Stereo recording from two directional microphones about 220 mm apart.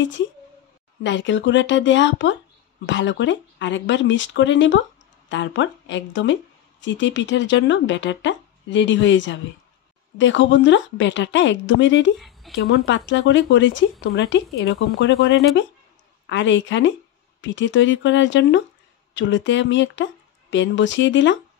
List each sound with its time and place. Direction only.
1.0 s speech: 55° left (ahead or behind)
12.2 s a sound: centre (ahead or behind)
12.5 s speech: 50° left (ahead or behind)